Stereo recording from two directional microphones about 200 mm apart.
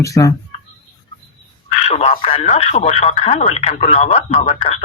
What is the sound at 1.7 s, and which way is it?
Speech, 30° left (ahead or behind).